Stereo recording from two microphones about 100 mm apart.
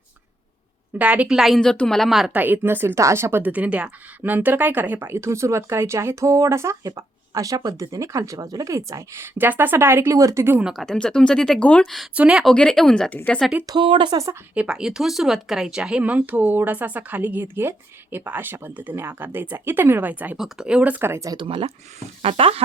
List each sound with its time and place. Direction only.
0.9 s speech: 15° right (ahead or behind)
1.4 s a woman's voice: centre (ahead or behind)
2.3 s a woman's voice: 20° right (ahead or behind)
10.6 s speech: 5° right (ahead or behind)
10.8 s speech: 5° left (ahead or behind)
12.1 s speech: 10° right (ahead or behind)
12.5 s speech: 5° left (ahead or behind)
13.7 s speech: 50° right (ahead or behind)
14.5 s speech: 10° right (ahead or behind); by 21.3 s 30° right (ahead or behind)
21.3 s speech: 65° right (ahead or behind)